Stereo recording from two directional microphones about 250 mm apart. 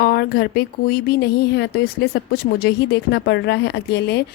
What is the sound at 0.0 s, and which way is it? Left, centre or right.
Speech, left.